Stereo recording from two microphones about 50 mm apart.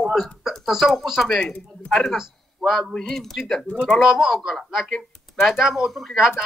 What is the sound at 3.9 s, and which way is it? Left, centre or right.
Speech, centre.